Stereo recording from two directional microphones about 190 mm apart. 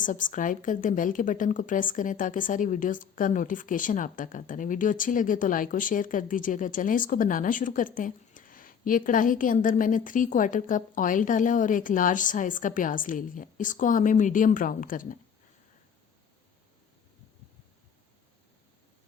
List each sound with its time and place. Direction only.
0.0 s a woman's voice: 45° left (ahead or behind)